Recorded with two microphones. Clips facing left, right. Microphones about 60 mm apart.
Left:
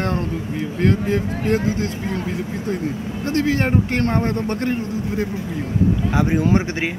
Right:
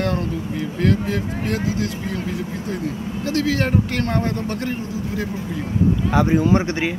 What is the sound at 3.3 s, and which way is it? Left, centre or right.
Speech, left.